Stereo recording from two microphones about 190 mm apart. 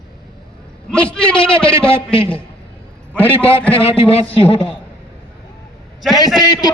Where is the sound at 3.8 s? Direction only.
30° left (ahead or behind).